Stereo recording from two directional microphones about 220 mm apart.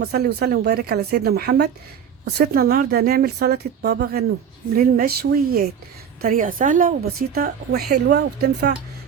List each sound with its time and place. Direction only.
0.0 s a woman's voice: 45° right (ahead or behind)